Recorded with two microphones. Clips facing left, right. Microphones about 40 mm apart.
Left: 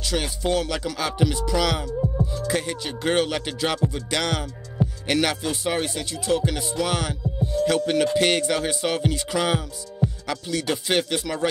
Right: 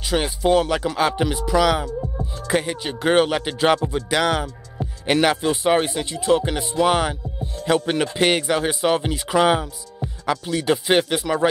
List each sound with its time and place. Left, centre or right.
0.0 s speech: right
0.4 s music: right
2.4 s music: right
3.8 s music: centre